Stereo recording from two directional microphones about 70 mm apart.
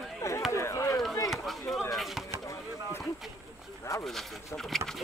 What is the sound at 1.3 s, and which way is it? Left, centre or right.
Chop, centre.